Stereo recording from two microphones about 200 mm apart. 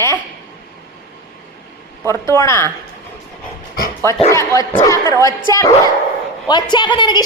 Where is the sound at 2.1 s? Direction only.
15° left (ahead or behind).